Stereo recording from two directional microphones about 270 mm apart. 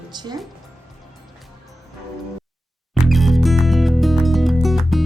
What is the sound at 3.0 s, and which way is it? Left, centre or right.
Music, centre.